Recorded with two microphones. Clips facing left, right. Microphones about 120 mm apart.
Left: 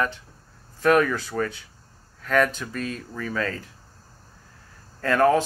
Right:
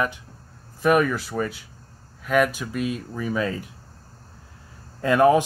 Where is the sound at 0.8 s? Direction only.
5° right (ahead or behind).